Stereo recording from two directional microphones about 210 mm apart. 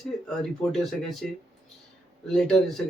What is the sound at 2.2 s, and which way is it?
Speech, 5° left (ahead or behind).